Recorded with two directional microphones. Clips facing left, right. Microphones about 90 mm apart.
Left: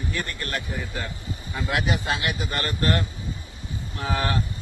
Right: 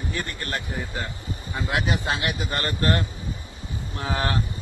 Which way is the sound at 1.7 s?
25° right (ahead or behind).